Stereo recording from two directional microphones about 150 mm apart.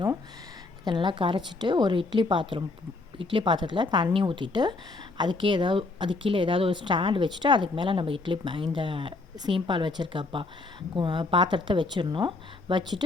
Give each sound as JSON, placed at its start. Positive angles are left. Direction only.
{"t": 0.9, "sound": "speech", "side_deg": -30}